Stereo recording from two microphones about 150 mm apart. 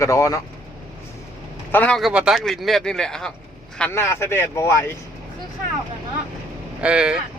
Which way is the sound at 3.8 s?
15° left (ahead or behind).